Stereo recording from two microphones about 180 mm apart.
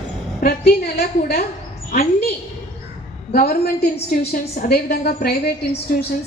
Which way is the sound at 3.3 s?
55° left (ahead or behind).